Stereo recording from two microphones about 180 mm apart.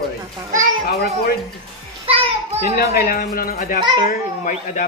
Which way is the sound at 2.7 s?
55° left (ahead or behind).